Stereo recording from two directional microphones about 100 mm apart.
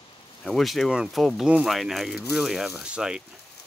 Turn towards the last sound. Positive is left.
turn(degrees=-10)  # may be behind; listen again after turning